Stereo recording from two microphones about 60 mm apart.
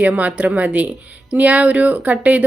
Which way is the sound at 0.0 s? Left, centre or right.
Right.